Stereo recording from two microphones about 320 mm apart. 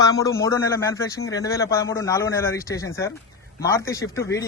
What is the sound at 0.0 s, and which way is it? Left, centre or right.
Speech, centre.